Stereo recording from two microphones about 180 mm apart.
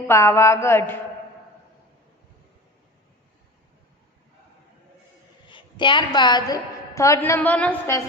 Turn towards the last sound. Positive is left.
turn(degrees=10)  # may be behind; listen again after turning